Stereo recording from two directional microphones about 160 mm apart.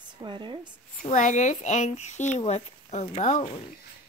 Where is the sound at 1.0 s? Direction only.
50° left (ahead or behind).